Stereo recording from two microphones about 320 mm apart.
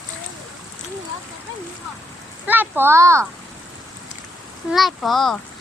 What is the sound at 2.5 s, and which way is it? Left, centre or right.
Speech, centre.